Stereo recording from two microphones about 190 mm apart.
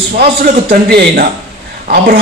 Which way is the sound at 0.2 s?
55° right (ahead or behind).